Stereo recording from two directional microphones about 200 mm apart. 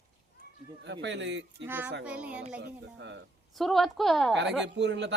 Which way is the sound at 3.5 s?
Centre (ahead or behind).